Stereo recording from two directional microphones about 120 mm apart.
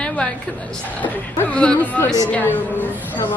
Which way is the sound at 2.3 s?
15° left (ahead or behind).